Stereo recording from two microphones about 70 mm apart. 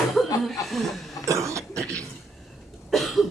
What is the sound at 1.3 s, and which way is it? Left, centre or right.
Cough, right.